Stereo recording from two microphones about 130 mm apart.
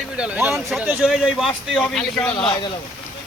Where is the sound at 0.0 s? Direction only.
10° right (ahead or behind).